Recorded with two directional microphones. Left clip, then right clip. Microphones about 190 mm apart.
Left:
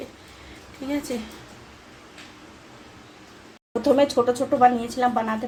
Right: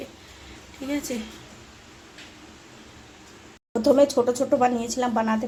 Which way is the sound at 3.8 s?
15° right (ahead or behind).